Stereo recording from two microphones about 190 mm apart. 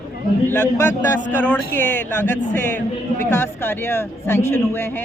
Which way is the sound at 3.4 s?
10° left (ahead or behind).